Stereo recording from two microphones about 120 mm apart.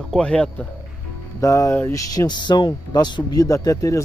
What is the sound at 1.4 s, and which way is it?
Speech, 25° left (ahead or behind).